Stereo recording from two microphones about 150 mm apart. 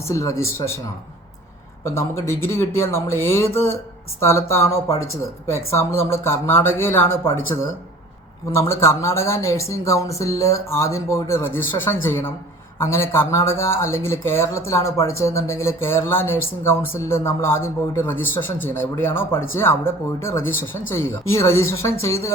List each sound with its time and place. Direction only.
0.0 s speech: 20° left (ahead or behind)
1.8 s speech: 15° left (ahead or behind)